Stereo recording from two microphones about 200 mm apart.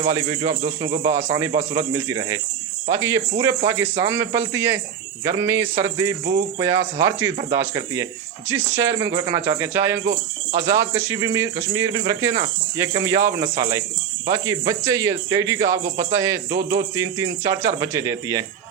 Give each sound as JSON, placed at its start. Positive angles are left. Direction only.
{"t": 0.1, "sound": "speech", "side_deg": -15}